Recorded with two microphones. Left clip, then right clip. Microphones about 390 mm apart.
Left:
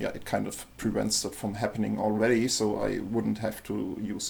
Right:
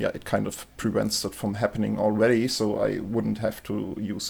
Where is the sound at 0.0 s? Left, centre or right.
Right.